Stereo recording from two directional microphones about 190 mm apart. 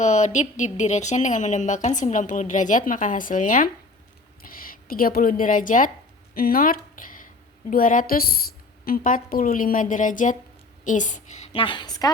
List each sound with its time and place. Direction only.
0.0 s a woman's voice: 40° left (ahead or behind); by 12.1 s 20° left (ahead or behind)